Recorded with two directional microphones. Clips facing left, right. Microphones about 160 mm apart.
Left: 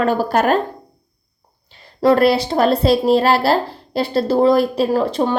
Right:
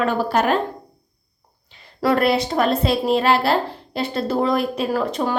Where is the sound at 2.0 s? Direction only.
30° left (ahead or behind).